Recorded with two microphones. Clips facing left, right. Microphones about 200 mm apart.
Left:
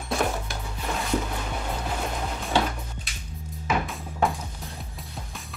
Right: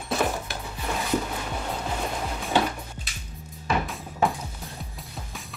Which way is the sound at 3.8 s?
Centre (ahead or behind).